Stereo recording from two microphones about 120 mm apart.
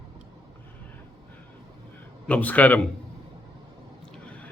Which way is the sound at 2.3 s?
15° left (ahead or behind).